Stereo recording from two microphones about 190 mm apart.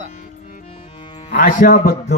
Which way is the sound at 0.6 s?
30° left (ahead or behind).